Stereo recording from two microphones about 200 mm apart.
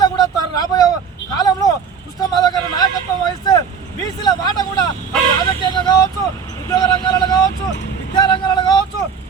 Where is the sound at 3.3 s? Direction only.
20° left (ahead or behind).